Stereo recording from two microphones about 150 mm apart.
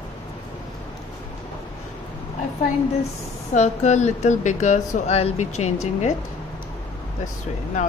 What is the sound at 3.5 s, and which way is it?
A woman's voice, 50° left (ahead or behind).